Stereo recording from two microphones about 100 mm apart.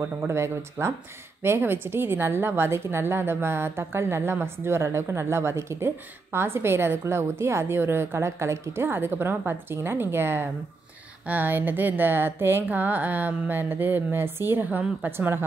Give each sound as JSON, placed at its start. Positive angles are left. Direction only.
{"t": 0.0, "sound": "a woman's voice", "side_deg": -25}